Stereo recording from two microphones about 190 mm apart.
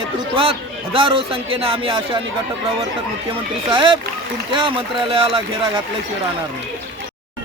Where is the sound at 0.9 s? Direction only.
30° right (ahead or behind).